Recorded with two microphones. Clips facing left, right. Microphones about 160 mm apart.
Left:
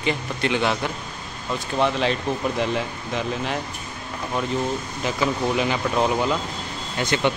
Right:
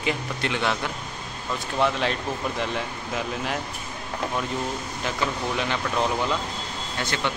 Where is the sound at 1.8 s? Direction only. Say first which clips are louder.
Left 2 dB; centre (ahead or behind).